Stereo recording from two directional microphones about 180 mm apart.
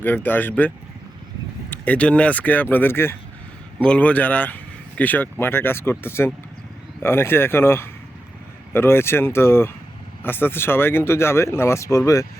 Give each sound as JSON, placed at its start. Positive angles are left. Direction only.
{"t": 0.0, "sound": "speech", "side_deg": 10}
{"t": 1.7, "sound": "speech", "side_deg": 10}